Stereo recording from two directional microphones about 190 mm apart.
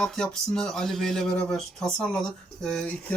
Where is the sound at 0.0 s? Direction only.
5° left (ahead or behind).